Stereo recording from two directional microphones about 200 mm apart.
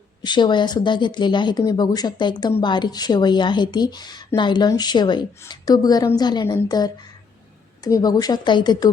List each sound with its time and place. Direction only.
0.3 s speech: 20° left (ahead or behind)